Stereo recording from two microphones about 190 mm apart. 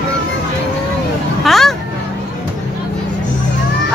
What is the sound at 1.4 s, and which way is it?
Hubbub, centre (ahead or behind).